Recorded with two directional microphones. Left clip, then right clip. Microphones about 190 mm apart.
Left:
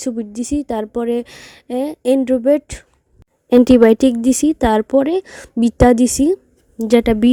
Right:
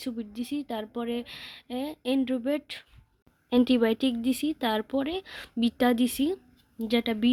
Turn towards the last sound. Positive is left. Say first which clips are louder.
# left 14 dB
turn(degrees=55)  # may be behind; listen again after turning